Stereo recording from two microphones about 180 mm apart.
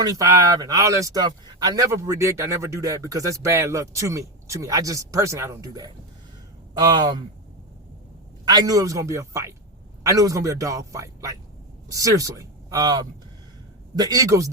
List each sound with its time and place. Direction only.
0.0 s a man's voice: 20° right (ahead or behind)
8.4 s a man's voice: 20° right (ahead or behind)